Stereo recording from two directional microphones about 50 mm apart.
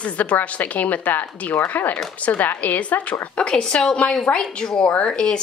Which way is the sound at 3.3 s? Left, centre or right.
Centre.